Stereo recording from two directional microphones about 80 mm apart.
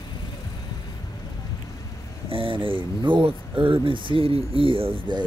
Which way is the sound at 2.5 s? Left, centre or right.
Right.